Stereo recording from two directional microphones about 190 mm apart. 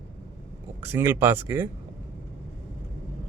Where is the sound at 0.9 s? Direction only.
10° right (ahead or behind).